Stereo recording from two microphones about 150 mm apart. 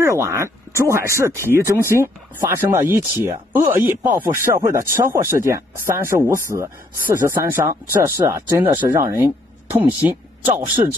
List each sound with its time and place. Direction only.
0.0 s speech: 20° right (ahead or behind)